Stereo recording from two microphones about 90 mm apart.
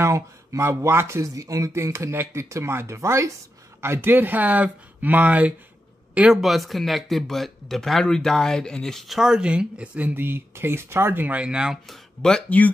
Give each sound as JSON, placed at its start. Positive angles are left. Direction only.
{"t": 0.0, "sound": "speech", "side_deg": -35}
{"t": 6.1, "sound": "speech", "side_deg": -5}
{"t": 11.9, "sound": "speech", "side_deg": 5}